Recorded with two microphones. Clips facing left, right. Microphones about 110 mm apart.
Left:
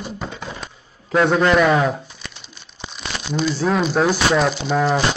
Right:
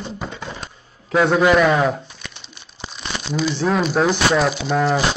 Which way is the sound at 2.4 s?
5° left (ahead or behind).